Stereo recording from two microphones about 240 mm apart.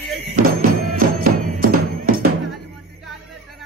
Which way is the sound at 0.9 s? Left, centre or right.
Right.